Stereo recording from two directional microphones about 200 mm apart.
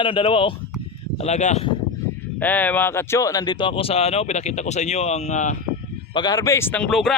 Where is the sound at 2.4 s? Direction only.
10° left (ahead or behind); by 5.6 s 35° left (ahead or behind).